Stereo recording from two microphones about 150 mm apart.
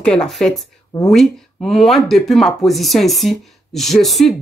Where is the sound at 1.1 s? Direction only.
Centre (ahead or behind).